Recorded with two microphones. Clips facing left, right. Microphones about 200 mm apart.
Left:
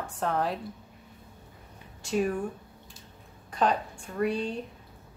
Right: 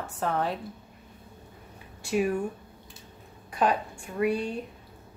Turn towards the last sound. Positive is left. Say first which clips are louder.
# right 2 dB
turn(degrees=-10)  # may be behind; listen again after turning